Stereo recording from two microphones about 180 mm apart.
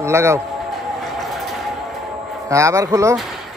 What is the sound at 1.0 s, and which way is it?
Vehicle, centre (ahead or behind).